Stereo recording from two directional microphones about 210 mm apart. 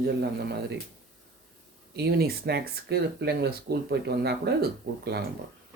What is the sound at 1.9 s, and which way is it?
Speech, 50° right (ahead or behind).